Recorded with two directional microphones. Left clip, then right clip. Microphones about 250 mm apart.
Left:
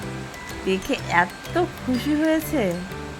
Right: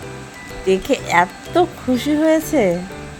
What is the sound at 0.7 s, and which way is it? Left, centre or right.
Speech, centre.